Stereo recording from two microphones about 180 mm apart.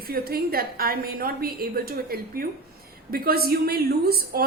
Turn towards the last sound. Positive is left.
turn(degrees=-60)  # may be behind; listen again after turning